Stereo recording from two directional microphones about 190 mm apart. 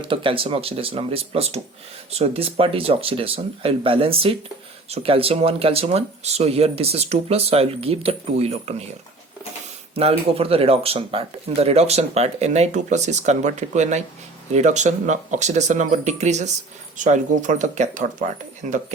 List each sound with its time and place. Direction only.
0.0 s speech: 25° right (ahead or behind)
9.9 s speech: 30° right (ahead or behind)